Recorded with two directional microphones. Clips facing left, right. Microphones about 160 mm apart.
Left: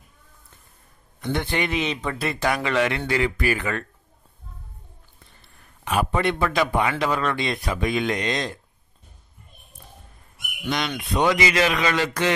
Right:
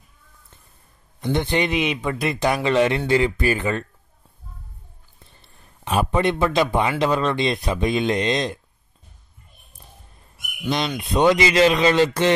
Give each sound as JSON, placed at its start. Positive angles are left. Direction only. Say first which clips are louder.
{"t": 1.2, "sound": "a man's voice", "louder": "right 4 dB", "side_deg": -20}
{"t": 5.4, "sound": "a man's voice", "louder": "right 1 dB", "side_deg": -20}
{"t": 11.0, "sound": "a man's voice", "louder": "right 4 dB", "side_deg": -25}